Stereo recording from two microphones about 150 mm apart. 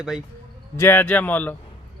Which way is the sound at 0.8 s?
15° left (ahead or behind).